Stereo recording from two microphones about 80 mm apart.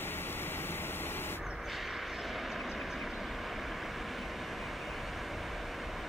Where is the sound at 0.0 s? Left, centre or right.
Left.